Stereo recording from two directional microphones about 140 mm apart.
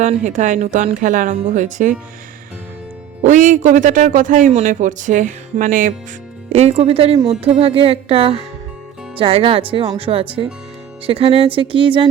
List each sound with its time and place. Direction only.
0.0 s speech: 60° right (ahead or behind)
3.2 s speech: 60° right (ahead or behind)
6.5 s music: 45° right (ahead or behind)
9.1 s speech: 40° right (ahead or behind)